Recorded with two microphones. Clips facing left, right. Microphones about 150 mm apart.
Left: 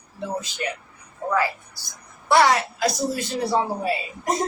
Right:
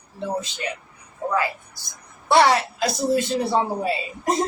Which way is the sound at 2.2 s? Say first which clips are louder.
Right 1 dB; 25° right (ahead or behind).